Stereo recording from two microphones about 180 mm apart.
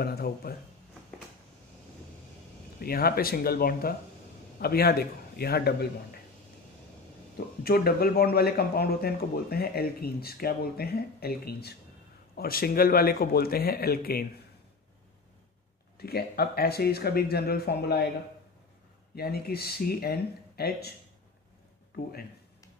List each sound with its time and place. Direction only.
0.0 s speech: 60° left (ahead or behind)
2.8 s speech: 55° left (ahead or behind)
7.6 s speech: 55° left (ahead or behind)
16.0 s speech: 60° left (ahead or behind)
19.1 s speech: 60° left (ahead or behind)